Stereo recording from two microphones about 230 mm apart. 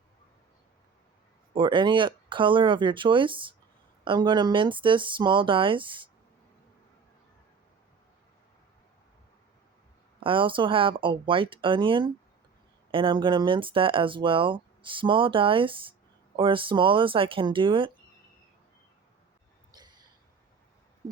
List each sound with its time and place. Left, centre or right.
1.5 s speech: right
10.2 s speech: right
19.7 s a sound: centre